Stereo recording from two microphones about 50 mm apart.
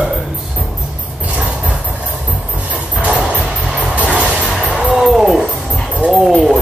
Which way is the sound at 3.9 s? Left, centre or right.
Right.